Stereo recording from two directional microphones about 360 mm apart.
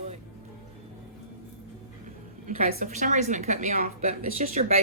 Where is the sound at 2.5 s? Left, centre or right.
Centre.